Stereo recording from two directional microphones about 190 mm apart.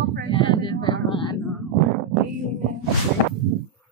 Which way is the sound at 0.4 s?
25° left (ahead or behind).